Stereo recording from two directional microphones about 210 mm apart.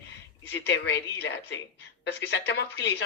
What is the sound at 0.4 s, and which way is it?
Speech, 55° left (ahead or behind).